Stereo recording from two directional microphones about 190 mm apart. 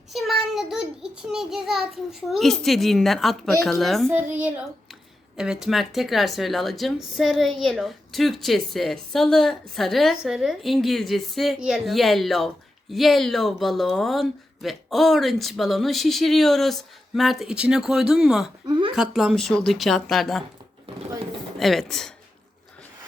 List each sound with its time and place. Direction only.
0.1 s a child's voice: centre (ahead or behind)
18.6 s speech: 25° right (ahead or behind)
18.9 s a woman's voice: centre (ahead or behind)
21.6 s a woman's voice: centre (ahead or behind)